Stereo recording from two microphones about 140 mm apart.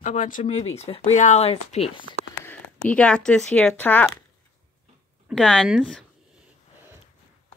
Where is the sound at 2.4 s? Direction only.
10° left (ahead or behind).